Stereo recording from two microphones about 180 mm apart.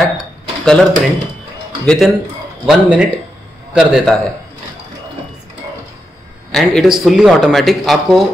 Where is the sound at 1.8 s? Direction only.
Centre (ahead or behind).